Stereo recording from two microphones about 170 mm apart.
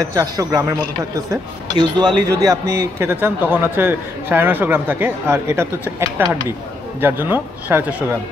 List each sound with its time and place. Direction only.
0.1 s a man's voice: 20° right (ahead or behind)